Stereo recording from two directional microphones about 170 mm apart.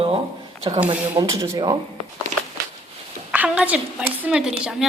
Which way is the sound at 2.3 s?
45° right (ahead or behind).